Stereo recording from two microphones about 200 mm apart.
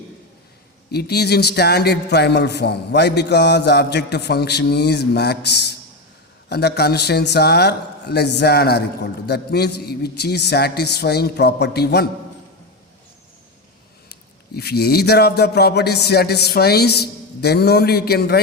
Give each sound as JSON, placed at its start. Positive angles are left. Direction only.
{"t": 0.9, "sound": "a man's voice", "side_deg": 55}
{"t": 14.1, "sound": "a man's voice", "side_deg": 55}